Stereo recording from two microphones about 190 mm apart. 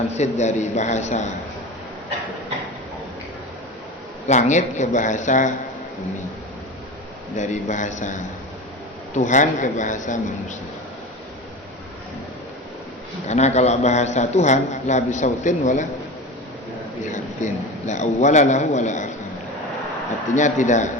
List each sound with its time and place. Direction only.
0.1 s a man's voice: 35° left (ahead or behind)
4.3 s a man's voice: 40° left (ahead or behind)
7.3 s a man's voice: 40° left (ahead or behind)
13.2 s a man's voice: 35° left (ahead or behind)
17.1 s a man's voice: 40° left (ahead or behind)
20.3 s a man's voice: 40° left (ahead or behind)